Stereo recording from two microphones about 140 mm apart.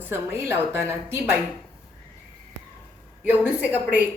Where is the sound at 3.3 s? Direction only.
10° right (ahead or behind).